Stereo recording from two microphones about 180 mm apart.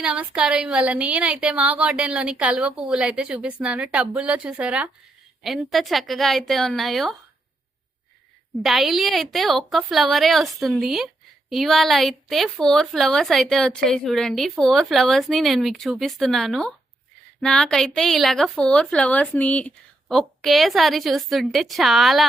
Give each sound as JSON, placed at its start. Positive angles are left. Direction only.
{"t": 0.0, "sound": "a woman's voice", "side_deg": -5}
{"t": 8.6, "sound": "a woman's voice", "side_deg": 0}